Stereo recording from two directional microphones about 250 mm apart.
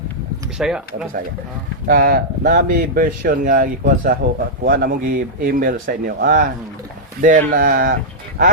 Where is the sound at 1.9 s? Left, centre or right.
Right.